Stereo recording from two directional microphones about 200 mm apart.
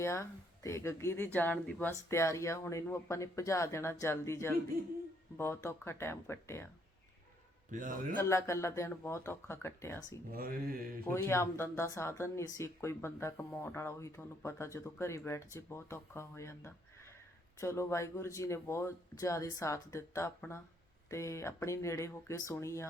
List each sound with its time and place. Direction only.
0.0 s speech: 15° left (ahead or behind)
7.7 s a man's voice: 40° right (ahead or behind)
8.2 s speech: 15° left (ahead or behind)
10.3 s speech: 45° right (ahead or behind)
11.0 s speech: 10° left (ahead or behind)